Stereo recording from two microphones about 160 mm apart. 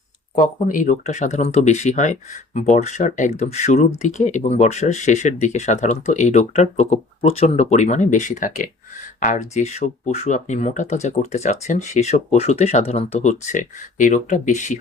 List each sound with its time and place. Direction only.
0.3 s speech: 55° left (ahead or behind)